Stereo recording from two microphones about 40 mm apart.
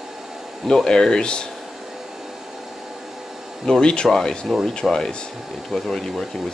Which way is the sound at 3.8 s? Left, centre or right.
Left.